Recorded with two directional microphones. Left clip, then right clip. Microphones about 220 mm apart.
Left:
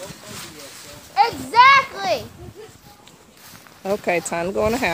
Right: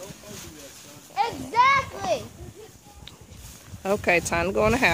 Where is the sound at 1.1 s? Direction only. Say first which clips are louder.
Left 7 dB; 5° left (ahead or behind).